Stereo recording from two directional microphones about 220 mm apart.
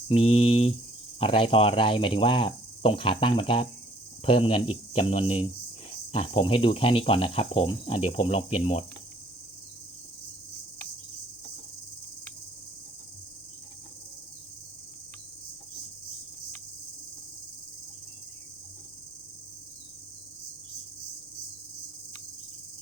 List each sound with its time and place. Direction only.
0.1 s speech: 25° left (ahead or behind)